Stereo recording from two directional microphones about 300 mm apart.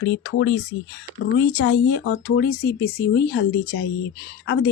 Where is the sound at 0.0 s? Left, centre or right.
Left.